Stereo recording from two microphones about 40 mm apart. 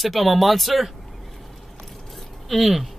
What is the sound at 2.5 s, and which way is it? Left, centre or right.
Speech, centre.